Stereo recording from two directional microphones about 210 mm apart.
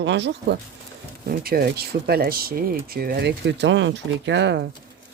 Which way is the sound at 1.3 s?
45° right (ahead or behind).